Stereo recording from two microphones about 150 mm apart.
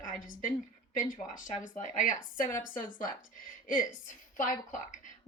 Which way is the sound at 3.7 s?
60° left (ahead or behind).